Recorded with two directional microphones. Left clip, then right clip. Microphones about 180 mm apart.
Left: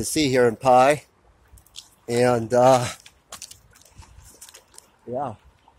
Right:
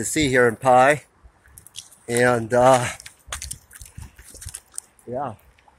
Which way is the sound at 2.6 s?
5° left (ahead or behind).